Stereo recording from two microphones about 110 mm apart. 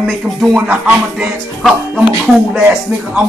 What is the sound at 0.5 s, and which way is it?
Music, 15° right (ahead or behind).